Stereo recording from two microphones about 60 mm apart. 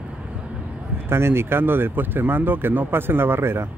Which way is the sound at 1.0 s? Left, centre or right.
Right.